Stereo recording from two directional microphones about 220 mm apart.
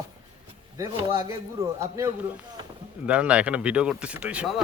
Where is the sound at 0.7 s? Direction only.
15° right (ahead or behind).